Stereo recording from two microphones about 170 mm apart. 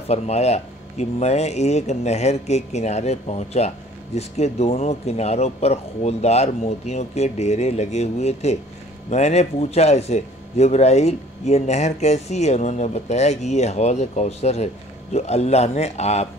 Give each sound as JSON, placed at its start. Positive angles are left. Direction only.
{"t": 0.1, "sound": "speech", "side_deg": 40}